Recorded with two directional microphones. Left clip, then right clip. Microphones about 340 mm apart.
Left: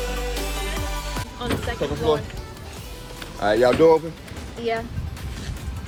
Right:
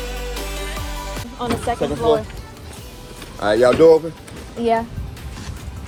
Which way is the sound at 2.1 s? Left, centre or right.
Right.